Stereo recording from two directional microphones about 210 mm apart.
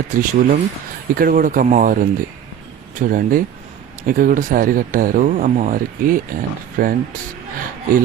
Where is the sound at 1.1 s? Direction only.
40° right (ahead or behind).